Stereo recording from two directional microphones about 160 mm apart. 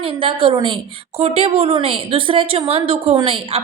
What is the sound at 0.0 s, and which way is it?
Speech, 35° right (ahead or behind).